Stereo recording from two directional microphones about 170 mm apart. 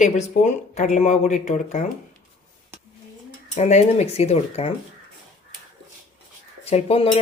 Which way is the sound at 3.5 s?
40° left (ahead or behind).